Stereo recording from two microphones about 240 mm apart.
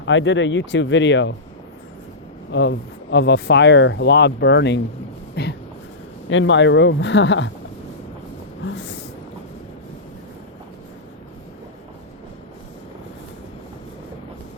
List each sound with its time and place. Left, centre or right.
0.0 s speech: left
2.5 s speech: left
5.3 s a sound: left
6.2 s speech: left